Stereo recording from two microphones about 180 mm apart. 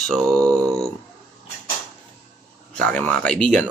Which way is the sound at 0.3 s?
15° right (ahead or behind).